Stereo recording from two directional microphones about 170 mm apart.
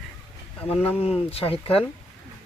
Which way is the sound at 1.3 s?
35° left (ahead or behind).